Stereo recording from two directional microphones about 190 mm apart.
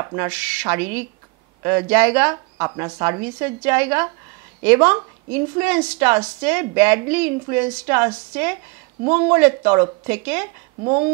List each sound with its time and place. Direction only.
0.0 s speech: 15° right (ahead or behind)
0.3 s speech: 5° right (ahead or behind)
2.3 s speech: 20° right (ahead or behind)
9.1 s speech: 10° right (ahead or behind)
10.8 s speech: 30° right (ahead or behind)